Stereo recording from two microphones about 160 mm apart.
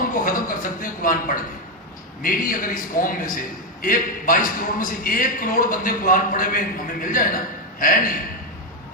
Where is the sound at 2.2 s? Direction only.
60° left (ahead or behind).